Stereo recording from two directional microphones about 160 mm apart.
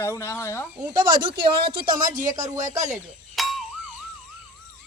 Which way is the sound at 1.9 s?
55° right (ahead or behind).